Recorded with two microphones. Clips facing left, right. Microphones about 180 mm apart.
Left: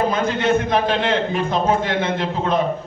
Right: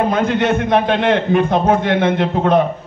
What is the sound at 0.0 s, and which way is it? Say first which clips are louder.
A man's voice: right 4 dB; 65° right (ahead or behind).